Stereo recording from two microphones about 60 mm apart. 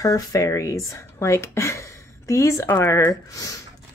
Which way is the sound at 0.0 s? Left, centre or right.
Left.